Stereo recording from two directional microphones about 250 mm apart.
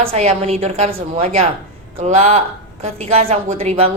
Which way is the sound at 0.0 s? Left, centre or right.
Right.